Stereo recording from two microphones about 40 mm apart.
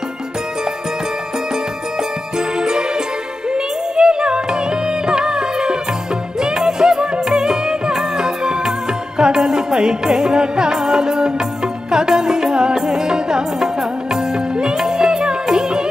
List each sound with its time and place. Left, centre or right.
2.3 s jingle bell: centre
3.4 s music: centre